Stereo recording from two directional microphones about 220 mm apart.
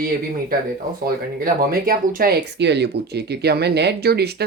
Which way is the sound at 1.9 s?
40° right (ahead or behind).